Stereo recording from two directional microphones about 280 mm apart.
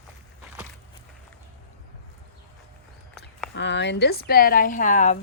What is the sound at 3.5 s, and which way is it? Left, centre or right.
Speech, left.